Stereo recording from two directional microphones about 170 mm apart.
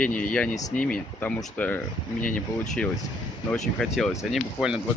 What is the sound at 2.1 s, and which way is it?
Speech, 50° left (ahead or behind).